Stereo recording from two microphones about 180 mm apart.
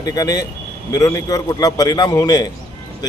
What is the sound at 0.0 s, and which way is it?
A man's voice, 20° left (ahead or behind).